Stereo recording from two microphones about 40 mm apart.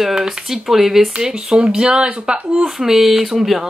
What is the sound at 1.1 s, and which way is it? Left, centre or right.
Speech, centre.